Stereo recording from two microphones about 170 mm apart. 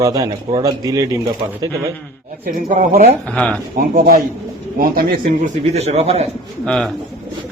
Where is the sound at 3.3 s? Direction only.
5° left (ahead or behind).